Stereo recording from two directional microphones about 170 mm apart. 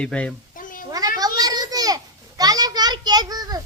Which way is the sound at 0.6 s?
55° left (ahead or behind).